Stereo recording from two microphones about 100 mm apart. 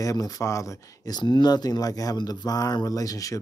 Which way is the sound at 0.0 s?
35° left (ahead or behind).